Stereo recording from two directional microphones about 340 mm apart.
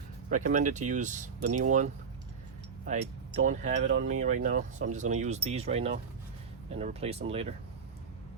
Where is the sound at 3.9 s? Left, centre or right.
Right.